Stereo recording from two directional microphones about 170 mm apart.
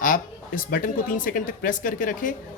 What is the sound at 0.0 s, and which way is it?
A woman's voice, 50° left (ahead or behind).